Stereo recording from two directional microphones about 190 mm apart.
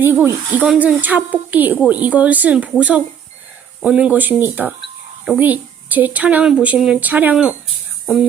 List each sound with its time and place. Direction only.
0.0 s speech: 10° right (ahead or behind)